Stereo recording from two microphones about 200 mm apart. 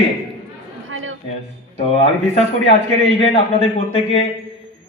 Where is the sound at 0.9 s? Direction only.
80° right.